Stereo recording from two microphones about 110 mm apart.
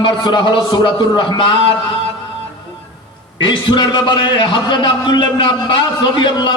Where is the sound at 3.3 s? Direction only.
45° left (ahead or behind).